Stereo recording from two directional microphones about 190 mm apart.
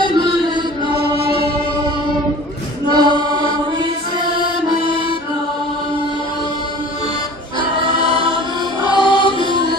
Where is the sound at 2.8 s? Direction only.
25° right (ahead or behind).